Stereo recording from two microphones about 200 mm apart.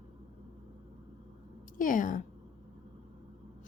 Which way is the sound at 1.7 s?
40° left (ahead or behind).